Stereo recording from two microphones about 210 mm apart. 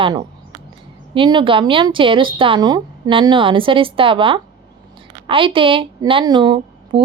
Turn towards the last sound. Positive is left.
turn(degrees=-20)  # may be behind; listen again after turning